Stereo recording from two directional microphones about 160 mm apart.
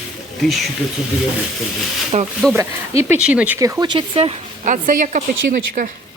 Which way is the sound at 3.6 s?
20° right (ahead or behind).